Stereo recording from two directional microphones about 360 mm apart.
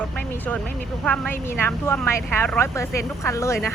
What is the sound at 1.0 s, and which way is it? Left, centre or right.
Speech, centre.